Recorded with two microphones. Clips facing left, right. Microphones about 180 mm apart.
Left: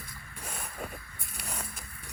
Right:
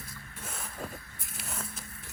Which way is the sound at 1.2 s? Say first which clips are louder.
Left 1 dB; centre (ahead or behind).